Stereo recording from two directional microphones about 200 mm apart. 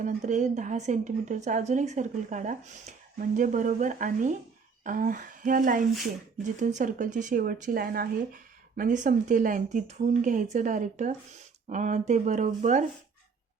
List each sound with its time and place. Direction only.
0.0 s speech: 35° right (ahead or behind)